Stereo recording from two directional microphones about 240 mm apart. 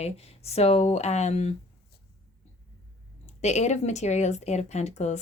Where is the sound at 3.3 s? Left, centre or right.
Left.